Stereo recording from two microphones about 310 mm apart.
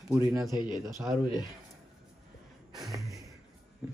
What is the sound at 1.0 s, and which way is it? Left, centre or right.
Speech, centre.